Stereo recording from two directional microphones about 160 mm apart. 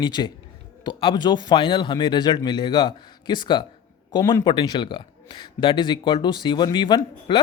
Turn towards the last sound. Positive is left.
turn(degrees=30)  # may be behind; listen again after turning